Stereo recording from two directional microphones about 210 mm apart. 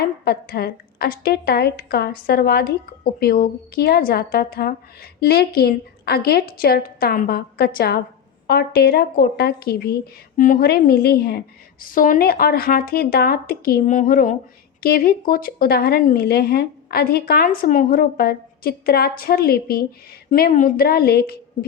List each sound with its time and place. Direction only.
0.3 s a woman's voice: 50° left (ahead or behind)